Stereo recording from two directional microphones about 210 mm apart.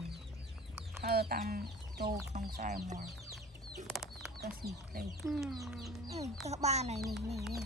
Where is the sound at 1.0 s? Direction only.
50° right (ahead or behind).